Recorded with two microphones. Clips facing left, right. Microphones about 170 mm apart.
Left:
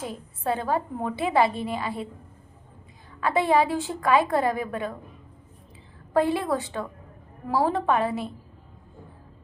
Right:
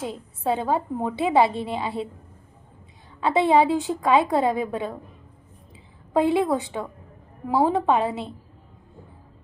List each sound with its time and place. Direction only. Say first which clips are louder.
0.1 s a woman's voice: right 1 dB; 20° right (ahead or behind)
3.2 s a woman's voice: right 3 dB; 20° right (ahead or behind)
6.1 s a woman's voice: right 3 dB; 20° right (ahead or behind)